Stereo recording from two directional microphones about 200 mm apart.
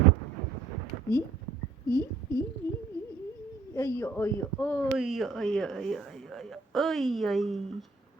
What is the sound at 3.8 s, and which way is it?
Speech, 15° left (ahead or behind).